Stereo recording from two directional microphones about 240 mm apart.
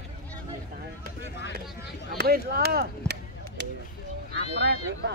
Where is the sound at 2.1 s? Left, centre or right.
Right.